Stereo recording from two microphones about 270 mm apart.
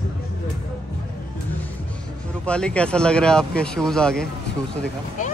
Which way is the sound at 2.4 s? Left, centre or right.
Centre.